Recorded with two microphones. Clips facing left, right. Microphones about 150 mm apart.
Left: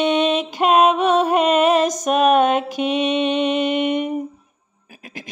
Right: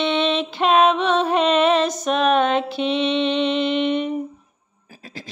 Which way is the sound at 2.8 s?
45° left (ahead or behind).